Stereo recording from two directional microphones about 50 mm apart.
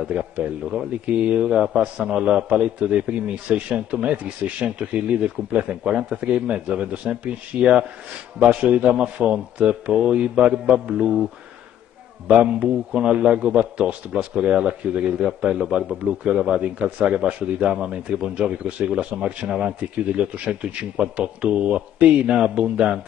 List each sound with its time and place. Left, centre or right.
0.0 s a man's voice: right
12.9 s a man's voice: centre